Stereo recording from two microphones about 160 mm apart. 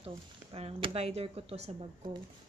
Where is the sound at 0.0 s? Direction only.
35° right (ahead or behind).